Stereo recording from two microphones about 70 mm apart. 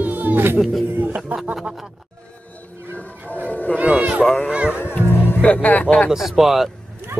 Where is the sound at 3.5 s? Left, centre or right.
Left.